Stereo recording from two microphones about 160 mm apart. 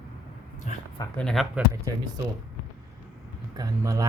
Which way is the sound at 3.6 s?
20° right (ahead or behind).